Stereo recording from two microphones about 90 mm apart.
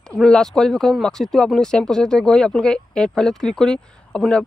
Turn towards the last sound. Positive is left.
turn(degrees=10)  # may be behind; listen again after turning